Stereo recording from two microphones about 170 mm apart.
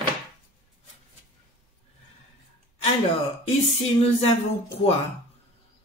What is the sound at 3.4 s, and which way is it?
Speech, 35° left (ahead or behind).